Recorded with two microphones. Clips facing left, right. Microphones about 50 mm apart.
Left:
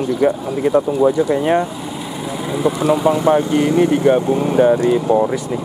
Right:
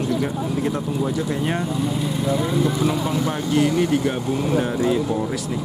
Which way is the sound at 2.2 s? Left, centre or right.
Centre.